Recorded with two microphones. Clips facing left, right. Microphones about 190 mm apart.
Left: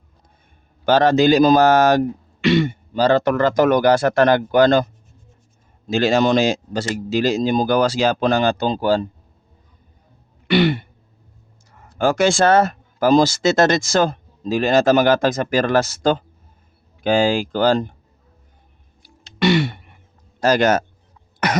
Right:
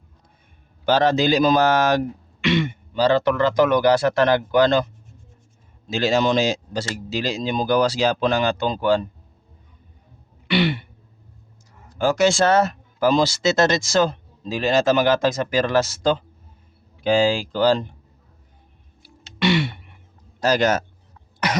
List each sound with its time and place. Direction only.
0.9 s speech: 50° left (ahead or behind)
5.9 s speech: 55° left (ahead or behind); by 9.0 s 35° left (ahead or behind)
10.5 s speech: 45° left (ahead or behind)
19.0 s a sound: 40° left (ahead or behind)
20.4 s speech: 55° left (ahead or behind)